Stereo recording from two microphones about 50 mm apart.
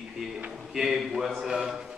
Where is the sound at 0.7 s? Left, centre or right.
Centre.